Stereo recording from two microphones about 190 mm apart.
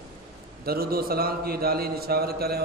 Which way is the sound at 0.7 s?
50° right (ahead or behind).